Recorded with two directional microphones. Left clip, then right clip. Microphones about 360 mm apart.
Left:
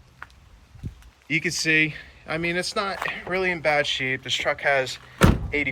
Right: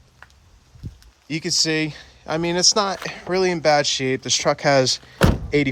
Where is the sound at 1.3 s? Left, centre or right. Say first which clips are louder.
Even; centre.